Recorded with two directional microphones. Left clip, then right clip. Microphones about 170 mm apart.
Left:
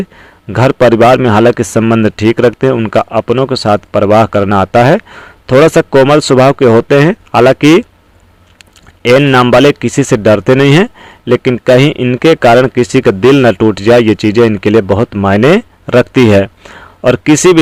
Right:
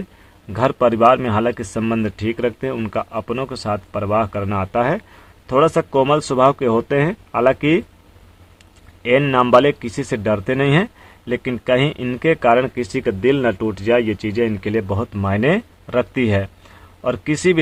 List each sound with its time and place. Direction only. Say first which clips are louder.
0.5 s speech: left 9 dB; 45° left (ahead or behind)
9.4 s speech: left 7 dB; 50° left (ahead or behind)